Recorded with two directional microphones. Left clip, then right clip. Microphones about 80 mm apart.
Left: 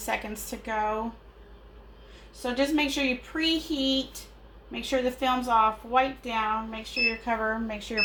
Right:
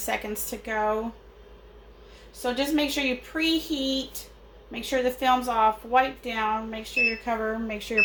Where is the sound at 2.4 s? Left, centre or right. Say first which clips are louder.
Right 1 dB; right.